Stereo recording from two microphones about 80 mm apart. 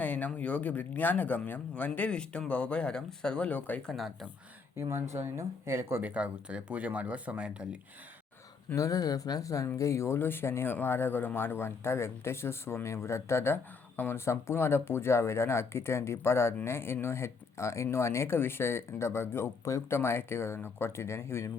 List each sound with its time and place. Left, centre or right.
0.0 s speech: centre
3.9 s speech: centre
4.8 s speech: right
6.0 s speech: centre
8.7 s speech: left